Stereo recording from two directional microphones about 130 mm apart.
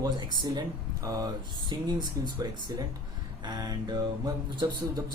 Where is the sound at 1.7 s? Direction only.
30° right (ahead or behind).